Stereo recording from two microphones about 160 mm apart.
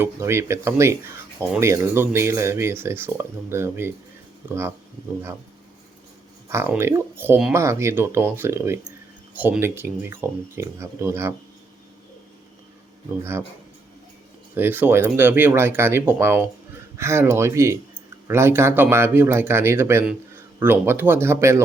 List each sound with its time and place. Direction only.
0.0 s speech: 15° right (ahead or behind)
6.5 s speech: 15° right (ahead or behind)
14.5 s speech: 10° right (ahead or behind)